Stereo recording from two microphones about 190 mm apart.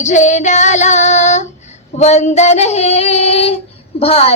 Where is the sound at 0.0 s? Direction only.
40° left (ahead or behind).